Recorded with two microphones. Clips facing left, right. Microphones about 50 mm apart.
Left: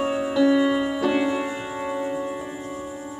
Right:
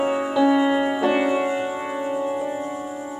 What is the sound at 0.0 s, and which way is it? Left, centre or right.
Music, centre.